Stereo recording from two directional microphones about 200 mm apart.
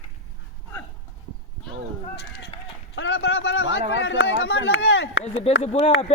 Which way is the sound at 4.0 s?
60° left (ahead or behind).